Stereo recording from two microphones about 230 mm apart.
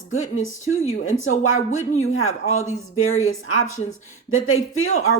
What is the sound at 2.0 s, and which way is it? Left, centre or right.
Speech, left.